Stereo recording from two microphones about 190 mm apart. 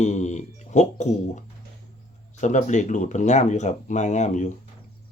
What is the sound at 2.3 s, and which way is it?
Speech, 40° left (ahead or behind).